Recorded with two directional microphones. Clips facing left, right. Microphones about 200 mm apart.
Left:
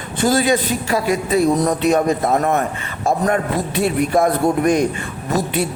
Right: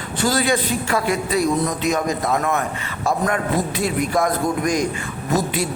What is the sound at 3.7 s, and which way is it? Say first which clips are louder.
Speech: left 4 dB; 65° left (ahead or behind).